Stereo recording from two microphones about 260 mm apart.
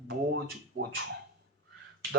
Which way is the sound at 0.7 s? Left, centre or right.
Right.